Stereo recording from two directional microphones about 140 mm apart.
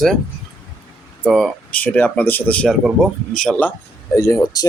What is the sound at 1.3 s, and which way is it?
Speech, centre (ahead or behind).